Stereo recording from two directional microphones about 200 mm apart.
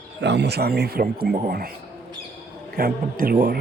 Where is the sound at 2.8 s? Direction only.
45° right (ahead or behind).